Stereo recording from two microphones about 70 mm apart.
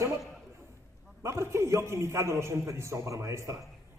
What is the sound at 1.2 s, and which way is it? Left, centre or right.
A man's voice, right.